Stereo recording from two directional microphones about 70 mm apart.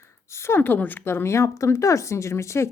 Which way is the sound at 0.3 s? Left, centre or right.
Left.